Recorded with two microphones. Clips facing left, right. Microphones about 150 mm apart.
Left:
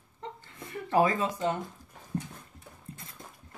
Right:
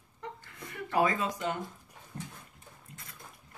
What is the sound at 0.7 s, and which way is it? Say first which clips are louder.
Speech: left 3 dB; 30° left (ahead or behind).